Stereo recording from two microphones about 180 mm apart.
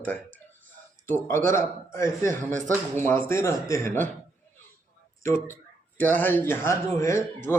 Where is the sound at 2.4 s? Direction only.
45° right (ahead or behind).